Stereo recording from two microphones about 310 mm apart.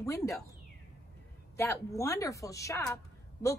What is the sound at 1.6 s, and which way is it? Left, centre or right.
A woman's voice, centre.